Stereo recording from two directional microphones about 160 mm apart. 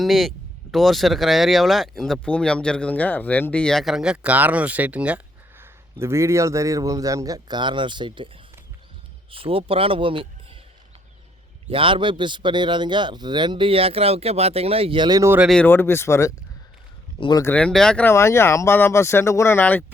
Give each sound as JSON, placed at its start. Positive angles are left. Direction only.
{"t": 0.0, "sound": "speech", "side_deg": 0}
{"t": 9.3, "sound": "speech", "side_deg": -35}
{"t": 11.7, "sound": "speech", "side_deg": -35}
{"t": 15.4, "sound": "speech", "side_deg": 10}
{"t": 17.2, "sound": "speech", "side_deg": 30}
{"t": 17.4, "sound": "speech", "side_deg": 10}